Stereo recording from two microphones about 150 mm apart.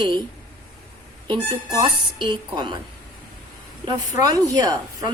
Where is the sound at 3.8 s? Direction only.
25° right (ahead or behind).